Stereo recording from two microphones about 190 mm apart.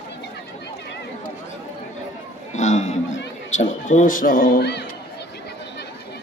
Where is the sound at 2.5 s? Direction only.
40° left (ahead or behind); by 4.8 s 55° left (ahead or behind).